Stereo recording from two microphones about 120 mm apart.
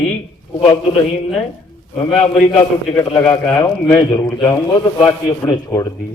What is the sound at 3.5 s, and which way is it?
Speech, 40° left (ahead or behind).